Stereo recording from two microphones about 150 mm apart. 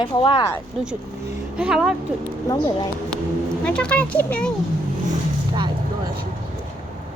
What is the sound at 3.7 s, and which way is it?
Speech, 10° left (ahead or behind).